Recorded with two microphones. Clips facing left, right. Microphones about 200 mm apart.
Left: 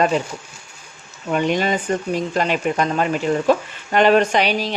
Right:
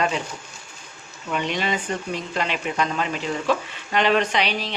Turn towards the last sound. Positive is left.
turn(degrees=45)  # may be behind; listen again after turning